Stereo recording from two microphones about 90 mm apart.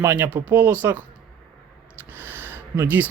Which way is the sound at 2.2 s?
25° right (ahead or behind).